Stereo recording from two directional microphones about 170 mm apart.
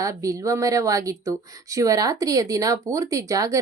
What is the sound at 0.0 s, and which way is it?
A woman's voice, 20° right (ahead or behind).